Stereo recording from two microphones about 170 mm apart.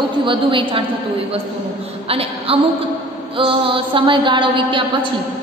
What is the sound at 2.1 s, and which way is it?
A woman's voice, 35° right (ahead or behind).